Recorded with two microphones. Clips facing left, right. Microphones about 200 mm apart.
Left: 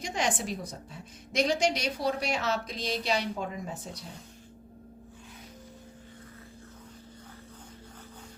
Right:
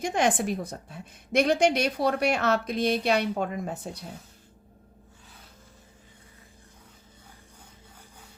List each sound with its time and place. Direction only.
0.0 s a woman's voice: 55° right (ahead or behind)